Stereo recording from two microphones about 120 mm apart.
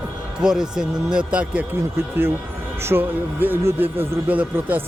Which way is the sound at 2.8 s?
15° right (ahead or behind).